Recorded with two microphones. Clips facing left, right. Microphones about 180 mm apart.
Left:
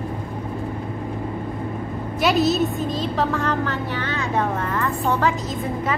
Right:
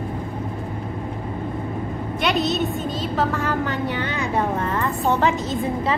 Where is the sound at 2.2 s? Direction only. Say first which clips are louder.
Left 3 dB; 5° left (ahead or behind).